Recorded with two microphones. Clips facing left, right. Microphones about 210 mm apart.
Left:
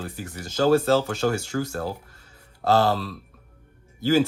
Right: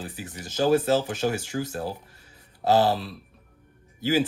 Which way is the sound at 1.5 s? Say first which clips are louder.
Left 2 dB; 45° left (ahead or behind).